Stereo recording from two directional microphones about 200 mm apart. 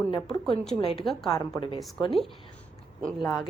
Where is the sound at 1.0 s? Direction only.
Centre (ahead or behind).